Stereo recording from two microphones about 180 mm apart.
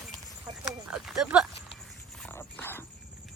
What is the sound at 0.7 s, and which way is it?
Speech, 5° right (ahead or behind).